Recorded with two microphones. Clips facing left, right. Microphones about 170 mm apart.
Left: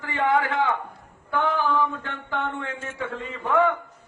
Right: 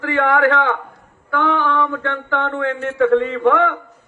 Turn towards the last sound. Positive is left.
turn(degrees=-75)  # may be behind; listen again after turning